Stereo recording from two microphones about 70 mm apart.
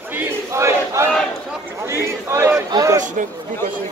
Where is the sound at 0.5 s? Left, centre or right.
Right.